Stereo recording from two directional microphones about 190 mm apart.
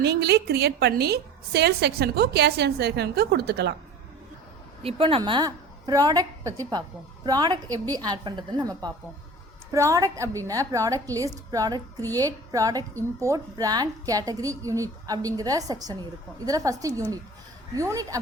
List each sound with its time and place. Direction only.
0.0 s a woman's voice: 60° right (ahead or behind)
4.8 s a woman's voice: 30° right (ahead or behind)